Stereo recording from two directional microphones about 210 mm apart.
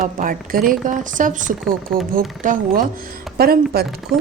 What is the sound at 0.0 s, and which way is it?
A woman's voice, 40° right (ahead or behind).